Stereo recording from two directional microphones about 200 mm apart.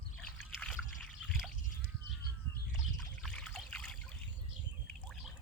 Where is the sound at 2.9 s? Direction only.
5° left (ahead or behind).